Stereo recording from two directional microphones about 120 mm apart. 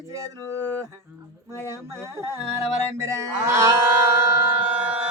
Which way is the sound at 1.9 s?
25° right (ahead or behind).